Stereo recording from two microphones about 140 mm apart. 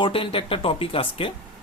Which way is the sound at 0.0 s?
40° left (ahead or behind).